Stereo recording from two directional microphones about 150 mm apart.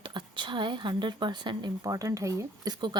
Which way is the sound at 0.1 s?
30° right (ahead or behind).